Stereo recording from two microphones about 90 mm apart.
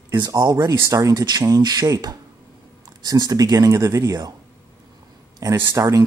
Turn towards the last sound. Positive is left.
turn(degrees=-35)  # may be behind; listen again after turning